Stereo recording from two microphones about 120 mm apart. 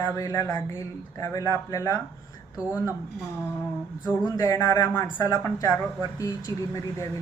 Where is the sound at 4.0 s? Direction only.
30° left (ahead or behind).